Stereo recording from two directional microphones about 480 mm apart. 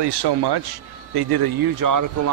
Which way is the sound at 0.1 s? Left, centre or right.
Right.